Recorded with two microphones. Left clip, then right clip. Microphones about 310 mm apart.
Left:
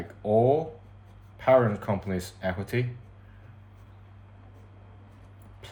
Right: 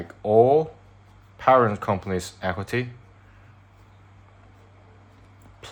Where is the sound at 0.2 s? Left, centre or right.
Right.